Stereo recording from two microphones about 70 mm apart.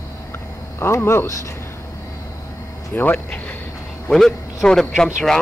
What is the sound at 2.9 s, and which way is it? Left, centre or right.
Speech, left.